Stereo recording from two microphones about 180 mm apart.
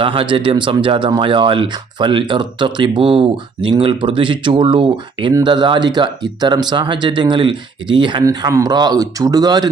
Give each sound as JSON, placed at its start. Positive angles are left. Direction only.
{"t": 0.0, "sound": "speech", "side_deg": -30}